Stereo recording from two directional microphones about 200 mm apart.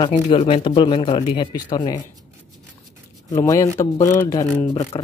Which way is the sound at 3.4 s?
15° left (ahead or behind).